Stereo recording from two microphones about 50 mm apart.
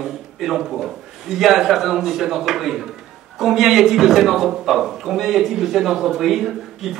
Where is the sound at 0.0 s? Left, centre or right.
Centre.